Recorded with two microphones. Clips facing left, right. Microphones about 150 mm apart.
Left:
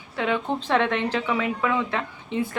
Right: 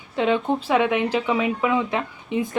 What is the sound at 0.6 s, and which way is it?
Speech, 10° right (ahead or behind).